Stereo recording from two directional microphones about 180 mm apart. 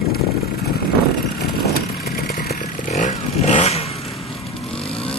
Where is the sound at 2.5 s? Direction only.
40° left (ahead or behind).